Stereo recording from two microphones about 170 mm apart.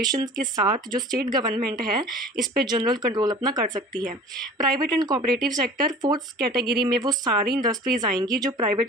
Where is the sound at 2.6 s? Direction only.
25° right (ahead or behind).